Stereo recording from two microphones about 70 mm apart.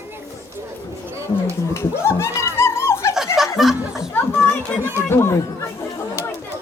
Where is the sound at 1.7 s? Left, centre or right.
Left.